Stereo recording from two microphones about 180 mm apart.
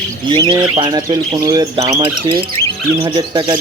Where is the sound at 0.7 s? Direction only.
25° right (ahead or behind).